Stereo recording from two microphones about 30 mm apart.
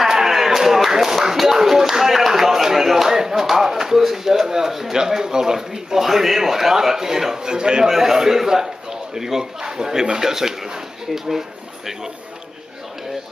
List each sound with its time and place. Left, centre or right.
0.0 s slap: centre
0.7 s clapping: centre
4.0 s a sound: centre
4.9 s speech: right
7.5 s a man's voice: right
7.8 s speech: centre